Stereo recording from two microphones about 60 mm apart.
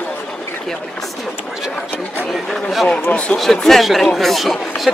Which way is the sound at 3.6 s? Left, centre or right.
Centre.